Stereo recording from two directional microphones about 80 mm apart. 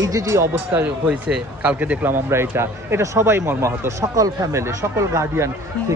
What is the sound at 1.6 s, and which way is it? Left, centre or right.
Speech, centre.